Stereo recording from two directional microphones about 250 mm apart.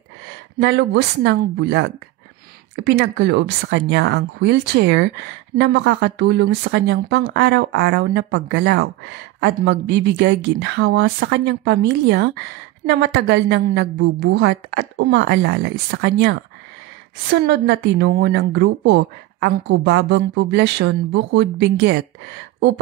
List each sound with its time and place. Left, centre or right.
0.6 s speech: right